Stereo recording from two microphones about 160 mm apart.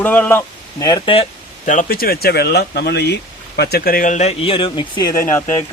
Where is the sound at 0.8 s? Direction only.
25° left (ahead or behind).